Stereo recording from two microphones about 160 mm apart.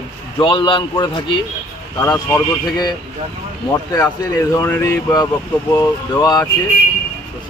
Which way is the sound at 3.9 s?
20° left (ahead or behind).